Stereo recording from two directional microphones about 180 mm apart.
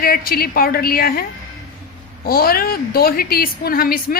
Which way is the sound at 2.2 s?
55° left (ahead or behind).